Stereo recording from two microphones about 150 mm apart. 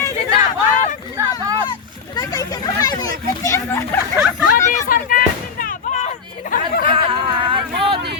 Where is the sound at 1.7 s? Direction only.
25° left (ahead or behind).